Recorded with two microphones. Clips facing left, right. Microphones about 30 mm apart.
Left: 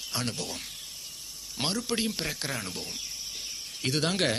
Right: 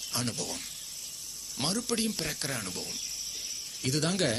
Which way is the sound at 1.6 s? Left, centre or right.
Left.